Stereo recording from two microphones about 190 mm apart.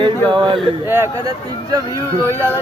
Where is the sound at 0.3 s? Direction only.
25° right (ahead or behind).